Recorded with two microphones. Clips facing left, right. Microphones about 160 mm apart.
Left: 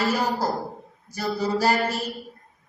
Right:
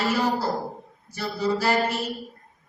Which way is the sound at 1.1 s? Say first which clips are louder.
Left 1 dB; 40° left (ahead or behind).